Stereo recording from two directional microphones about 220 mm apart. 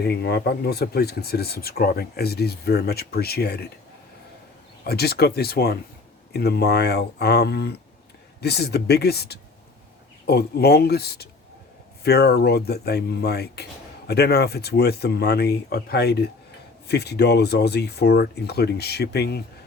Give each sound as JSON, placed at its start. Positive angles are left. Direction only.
{"t": 0.0, "sound": "speech", "side_deg": 45}
{"t": 4.8, "sound": "speech", "side_deg": 45}